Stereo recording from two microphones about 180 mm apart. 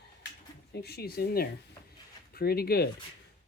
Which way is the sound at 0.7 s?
65° left (ahead or behind).